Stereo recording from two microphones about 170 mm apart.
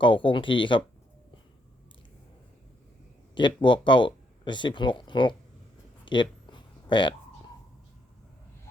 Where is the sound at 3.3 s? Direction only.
30° left (ahead or behind).